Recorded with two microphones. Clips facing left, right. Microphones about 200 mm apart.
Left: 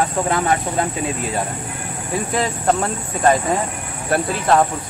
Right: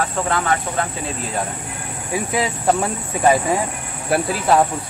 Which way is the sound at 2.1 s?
5° right (ahead or behind).